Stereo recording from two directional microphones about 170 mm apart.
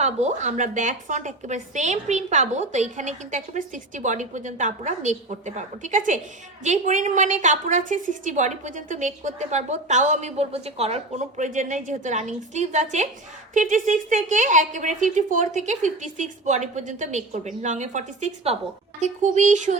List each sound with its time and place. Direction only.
0.0 s a woman's voice: 40° right (ahead or behind)